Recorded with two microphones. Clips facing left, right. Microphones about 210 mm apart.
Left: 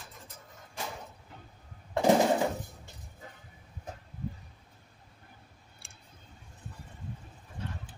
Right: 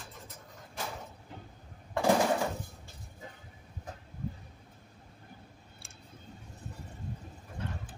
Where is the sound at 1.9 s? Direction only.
20° left (ahead or behind).